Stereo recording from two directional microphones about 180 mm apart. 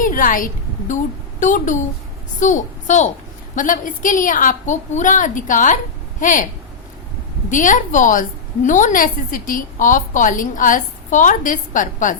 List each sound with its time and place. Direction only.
0.0 s a sound: 50° left (ahead or behind)
1.4 s a woman's voice: 45° left (ahead or behind)
7.5 s a woman's voice: 45° left (ahead or behind)